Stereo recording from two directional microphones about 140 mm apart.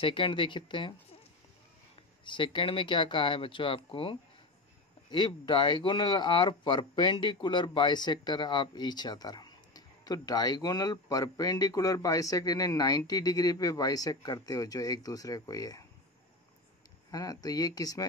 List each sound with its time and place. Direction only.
0.0 s speech: 35° left (ahead or behind)
2.2 s speech: 35° left (ahead or behind)
17.1 s speech: 25° left (ahead or behind)